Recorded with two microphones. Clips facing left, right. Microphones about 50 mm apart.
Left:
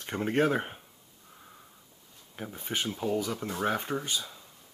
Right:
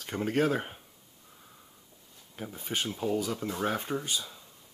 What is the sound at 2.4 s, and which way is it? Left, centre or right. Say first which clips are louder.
Speech: even; centre.